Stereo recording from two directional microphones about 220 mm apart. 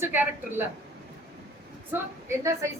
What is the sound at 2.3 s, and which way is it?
Speech, 15° right (ahead or behind).